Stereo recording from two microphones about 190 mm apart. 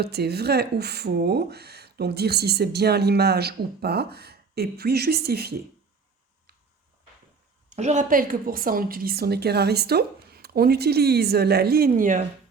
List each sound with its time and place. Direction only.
0.0 s speech: 60° right (ahead or behind)
7.8 s speech: 40° right (ahead or behind)